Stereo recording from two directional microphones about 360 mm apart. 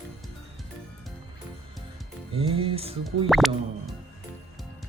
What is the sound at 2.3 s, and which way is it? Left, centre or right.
Music, centre.